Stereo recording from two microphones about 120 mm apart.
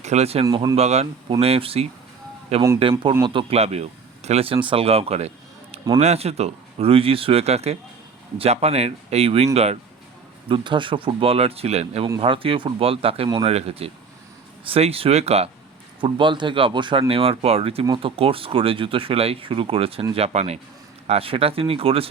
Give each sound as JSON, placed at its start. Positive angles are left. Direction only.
{"t": 0.0, "sound": "speech", "side_deg": -65}
{"t": 1.3, "sound": "speech", "side_deg": -55}
{"t": 3.2, "sound": "speech", "side_deg": -45}
{"t": 3.6, "sound": "speech", "side_deg": -60}
{"t": 10.5, "sound": "speech", "side_deg": -40}
{"t": 12.2, "sound": "speech", "side_deg": -50}
{"t": 16.0, "sound": "speech", "side_deg": -45}
{"t": 20.1, "sound": "speech", "side_deg": -60}
{"t": 21.1, "sound": "speech", "side_deg": -50}